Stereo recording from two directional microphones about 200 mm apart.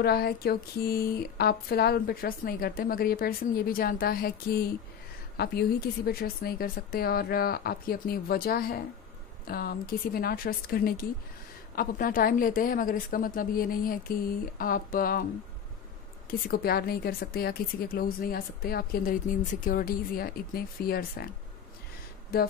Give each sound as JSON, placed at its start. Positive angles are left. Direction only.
{"t": 0.0, "sound": "speech", "side_deg": 50}
{"t": 16.3, "sound": "speech", "side_deg": 50}
{"t": 22.3, "sound": "speech", "side_deg": 50}